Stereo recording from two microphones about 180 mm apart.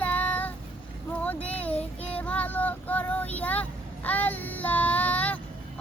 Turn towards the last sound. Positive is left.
turn(degrees=10)  # may be behind; listen again after turning